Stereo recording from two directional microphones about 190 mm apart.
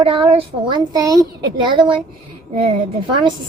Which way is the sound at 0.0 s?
30° right (ahead or behind).